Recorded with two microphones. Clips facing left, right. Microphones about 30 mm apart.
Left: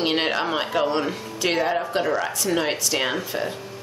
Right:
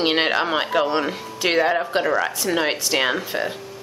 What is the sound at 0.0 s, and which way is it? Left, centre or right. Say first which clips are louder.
A woman's voice: right 3 dB; centre.